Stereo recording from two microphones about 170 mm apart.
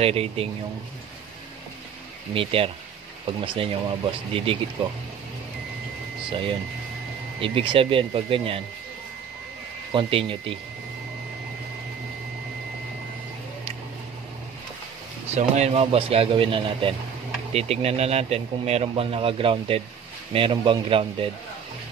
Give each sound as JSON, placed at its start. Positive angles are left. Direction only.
{"t": 0.0, "sound": "speech", "side_deg": -35}
{"t": 2.3, "sound": "speech", "side_deg": -35}
{"t": 7.3, "sound": "speech", "side_deg": -30}
{"t": 9.9, "sound": "speech", "side_deg": -30}
{"t": 15.2, "sound": "speech", "side_deg": -40}